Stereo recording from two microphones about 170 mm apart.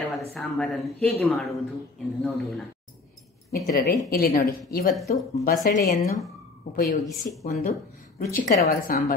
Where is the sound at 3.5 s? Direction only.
65° left (ahead or behind).